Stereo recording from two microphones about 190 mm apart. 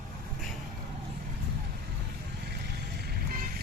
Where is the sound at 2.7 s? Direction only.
55° right (ahead or behind).